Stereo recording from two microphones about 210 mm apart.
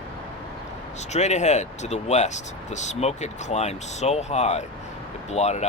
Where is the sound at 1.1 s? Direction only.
35° left (ahead or behind).